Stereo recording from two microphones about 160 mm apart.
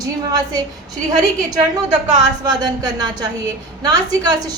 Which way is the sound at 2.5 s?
25° right (ahead or behind).